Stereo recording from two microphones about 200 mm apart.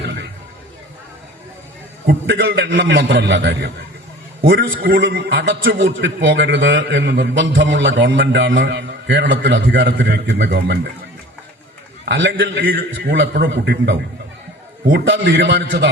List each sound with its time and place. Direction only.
0.0 s a sound: 60° right (ahead or behind)
2.0 s a man's voice: 55° right (ahead or behind)
4.4 s a man's voice: 50° right (ahead or behind)
12.0 s a man's voice: 65° right (ahead or behind)
14.9 s a man's voice: 65° right (ahead or behind)